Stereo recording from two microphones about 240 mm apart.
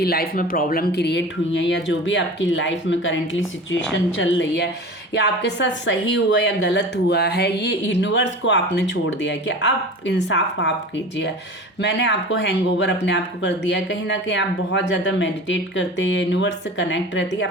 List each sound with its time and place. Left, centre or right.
0.0 s speech: left
11.8 s speech: left